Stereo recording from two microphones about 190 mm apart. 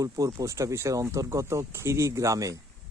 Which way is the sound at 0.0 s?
20° right (ahead or behind).